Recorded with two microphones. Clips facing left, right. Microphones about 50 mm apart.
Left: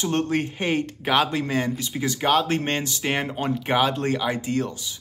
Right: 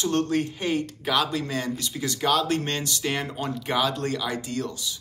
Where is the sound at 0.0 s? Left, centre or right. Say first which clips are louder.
Even; left.